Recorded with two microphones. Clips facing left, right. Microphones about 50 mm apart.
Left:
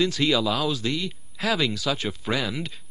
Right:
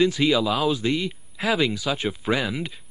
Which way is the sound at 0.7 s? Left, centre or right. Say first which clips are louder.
Right 3 dB; right.